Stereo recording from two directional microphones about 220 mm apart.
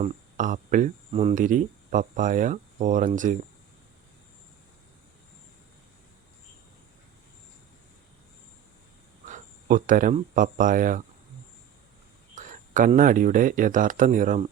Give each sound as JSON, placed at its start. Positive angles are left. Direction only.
{"t": 0.0, "sound": "speech", "side_deg": -35}
{"t": 9.2, "sound": "speech", "side_deg": -35}
{"t": 12.3, "sound": "speech", "side_deg": -35}